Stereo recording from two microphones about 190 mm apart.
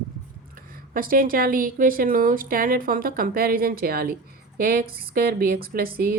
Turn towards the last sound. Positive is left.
turn(degrees=-50)  # may be behind; listen again after turning